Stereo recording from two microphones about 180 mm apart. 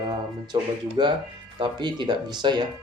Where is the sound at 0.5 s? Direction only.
25° right (ahead or behind).